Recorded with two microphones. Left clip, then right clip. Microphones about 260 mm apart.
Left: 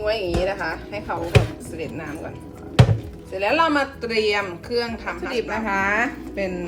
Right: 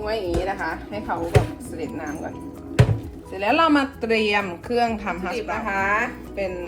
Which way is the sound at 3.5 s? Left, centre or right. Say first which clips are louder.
Right 1 dB; right.